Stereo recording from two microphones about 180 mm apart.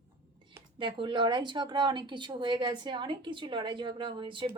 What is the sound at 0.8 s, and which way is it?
Speech, 25° right (ahead or behind).